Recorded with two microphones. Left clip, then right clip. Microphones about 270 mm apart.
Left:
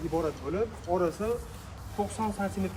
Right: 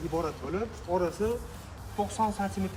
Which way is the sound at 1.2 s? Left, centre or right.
Centre.